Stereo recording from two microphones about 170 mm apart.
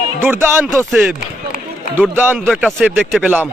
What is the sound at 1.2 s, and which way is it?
Run, 50° left (ahead or behind).